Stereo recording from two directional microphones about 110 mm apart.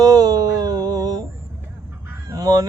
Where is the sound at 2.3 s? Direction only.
35° right (ahead or behind).